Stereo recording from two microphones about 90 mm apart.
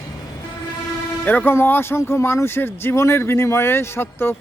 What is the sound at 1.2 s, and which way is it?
Speech, 20° left (ahead or behind).